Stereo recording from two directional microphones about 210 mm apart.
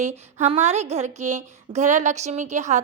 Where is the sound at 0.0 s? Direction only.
35° right (ahead or behind).